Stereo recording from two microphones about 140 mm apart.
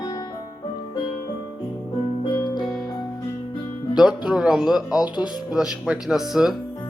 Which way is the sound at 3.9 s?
5° right (ahead or behind).